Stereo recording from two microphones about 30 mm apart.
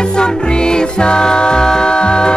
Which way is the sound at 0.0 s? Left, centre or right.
Left.